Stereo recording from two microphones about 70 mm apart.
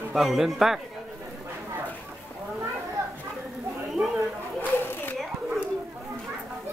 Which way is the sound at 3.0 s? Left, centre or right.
Right.